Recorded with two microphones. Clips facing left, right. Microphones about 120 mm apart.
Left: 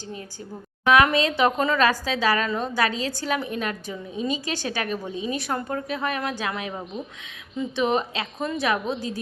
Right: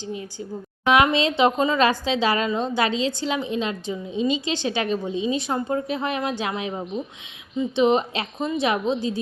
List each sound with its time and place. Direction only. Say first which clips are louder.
0.0 s a woman's voice: right 5 dB; 15° right (ahead or behind)